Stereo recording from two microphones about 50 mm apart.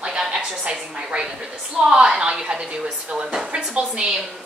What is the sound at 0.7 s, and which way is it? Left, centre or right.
A woman's voice, centre.